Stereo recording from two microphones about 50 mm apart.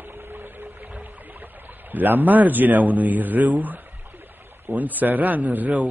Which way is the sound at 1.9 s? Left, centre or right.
Right.